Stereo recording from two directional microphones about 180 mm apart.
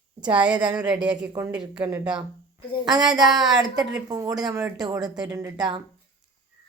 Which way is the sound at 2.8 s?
20° right (ahead or behind).